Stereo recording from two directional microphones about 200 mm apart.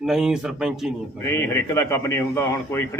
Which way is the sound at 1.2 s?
10° left (ahead or behind).